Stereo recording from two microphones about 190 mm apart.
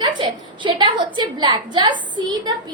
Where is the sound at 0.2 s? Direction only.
25° right (ahead or behind).